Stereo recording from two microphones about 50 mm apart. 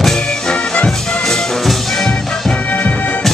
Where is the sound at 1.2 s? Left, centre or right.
Centre.